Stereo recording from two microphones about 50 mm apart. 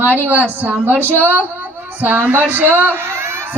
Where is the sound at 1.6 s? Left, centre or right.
Right.